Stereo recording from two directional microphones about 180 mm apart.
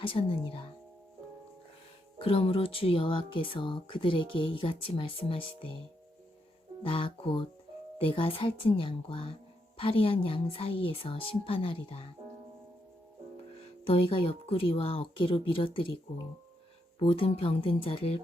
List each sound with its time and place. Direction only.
0.0 s speech: 30° left (ahead or behind)
2.1 s speech: 30° left (ahead or behind)
6.8 s speech: 30° left (ahead or behind)
13.8 s speech: 30° left (ahead or behind)
17.0 s speech: 30° left (ahead or behind)